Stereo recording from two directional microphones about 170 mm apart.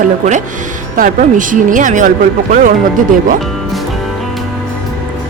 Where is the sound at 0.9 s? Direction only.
50° right (ahead or behind).